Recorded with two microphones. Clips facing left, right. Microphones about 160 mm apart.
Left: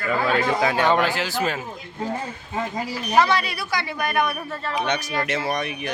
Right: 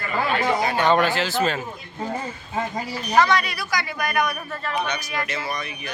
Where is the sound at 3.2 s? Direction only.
30° left (ahead or behind).